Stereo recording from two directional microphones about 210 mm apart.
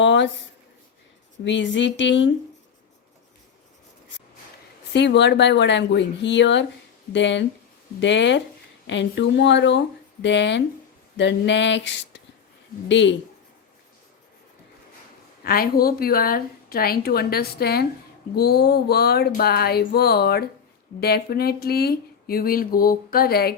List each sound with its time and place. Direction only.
0.0 s a sound: 60° left (ahead or behind)
1.5 s speech: 60° left (ahead or behind)
4.9 s speech: 55° left (ahead or behind)
15.4 s speech: 45° left (ahead or behind)